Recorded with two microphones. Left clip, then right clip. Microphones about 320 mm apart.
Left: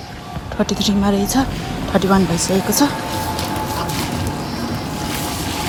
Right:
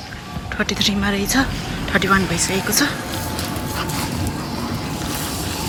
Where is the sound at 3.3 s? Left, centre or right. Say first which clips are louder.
Left 4 dB; centre.